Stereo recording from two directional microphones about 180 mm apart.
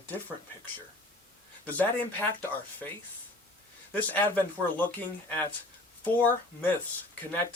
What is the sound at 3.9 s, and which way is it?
Speech, 10° left (ahead or behind).